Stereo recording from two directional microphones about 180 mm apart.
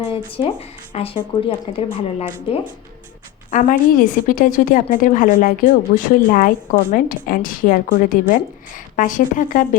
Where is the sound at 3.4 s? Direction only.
45° left (ahead or behind).